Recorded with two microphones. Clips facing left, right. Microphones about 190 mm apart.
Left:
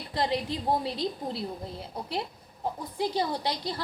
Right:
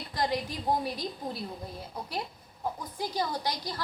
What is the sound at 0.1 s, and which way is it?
A woman's voice, 25° left (ahead or behind).